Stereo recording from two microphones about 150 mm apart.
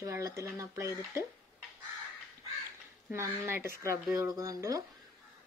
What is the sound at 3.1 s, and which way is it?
A woman's voice, 15° right (ahead or behind).